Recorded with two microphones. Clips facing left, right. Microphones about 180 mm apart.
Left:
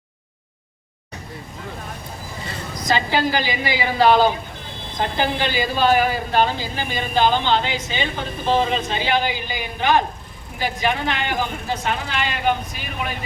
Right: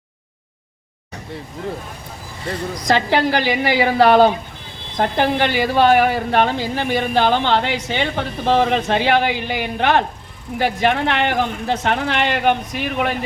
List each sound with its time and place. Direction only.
2.5 s a woman's voice: 65° right (ahead or behind)